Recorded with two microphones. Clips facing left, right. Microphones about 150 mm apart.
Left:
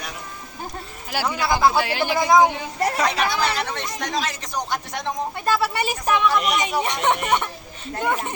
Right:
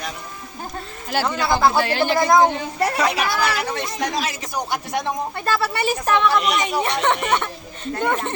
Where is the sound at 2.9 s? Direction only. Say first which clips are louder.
Even; 5° right (ahead or behind).